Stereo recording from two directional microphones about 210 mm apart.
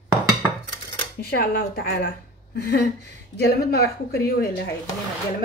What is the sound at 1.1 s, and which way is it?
Speech, 45° left (ahead or behind).